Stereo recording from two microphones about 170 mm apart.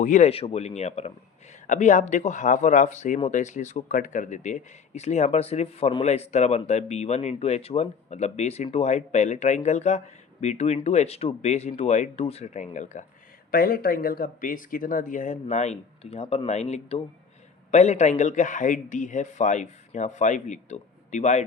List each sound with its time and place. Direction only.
0.0 s speech: 50° left (ahead or behind)
0.3 s speech: 35° left (ahead or behind)
13.5 s speech: 60° left (ahead or behind); by 21.4 s 45° left (ahead or behind)